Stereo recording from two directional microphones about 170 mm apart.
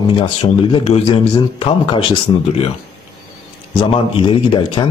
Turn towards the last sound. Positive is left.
turn(degrees=30)  # may be behind; listen again after turning